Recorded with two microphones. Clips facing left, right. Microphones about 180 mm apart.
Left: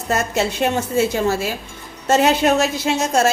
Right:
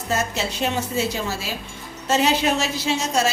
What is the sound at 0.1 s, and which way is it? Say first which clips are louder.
A woman's voice: left 5 dB; 55° left (ahead or behind).